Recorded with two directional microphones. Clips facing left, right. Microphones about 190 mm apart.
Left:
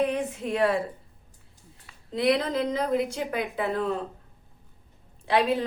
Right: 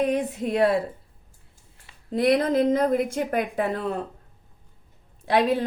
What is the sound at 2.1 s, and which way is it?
A woman's voice, 45° right (ahead or behind).